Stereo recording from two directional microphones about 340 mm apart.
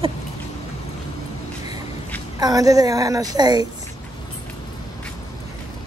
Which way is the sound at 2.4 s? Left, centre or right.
Centre.